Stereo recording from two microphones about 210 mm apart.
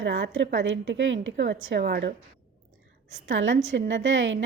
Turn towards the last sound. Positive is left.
turn(degrees=-60)  # may be behind; listen again after turning